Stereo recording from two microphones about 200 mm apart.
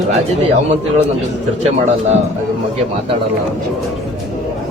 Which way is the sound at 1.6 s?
35° right (ahead or behind).